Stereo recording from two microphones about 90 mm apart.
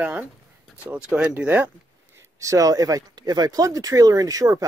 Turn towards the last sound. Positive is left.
turn(degrees=-40)  # may be behind; listen again after turning